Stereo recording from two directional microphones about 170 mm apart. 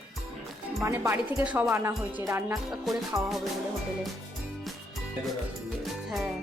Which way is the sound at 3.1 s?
20° right (ahead or behind).